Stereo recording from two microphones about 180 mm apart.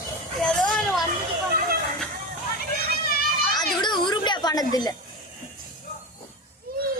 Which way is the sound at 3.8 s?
25° left (ahead or behind).